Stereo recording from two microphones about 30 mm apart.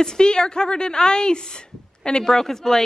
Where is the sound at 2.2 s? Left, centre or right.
Centre.